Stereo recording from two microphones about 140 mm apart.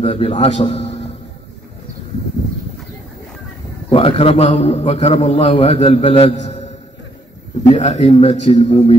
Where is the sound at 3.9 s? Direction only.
40° left (ahead or behind).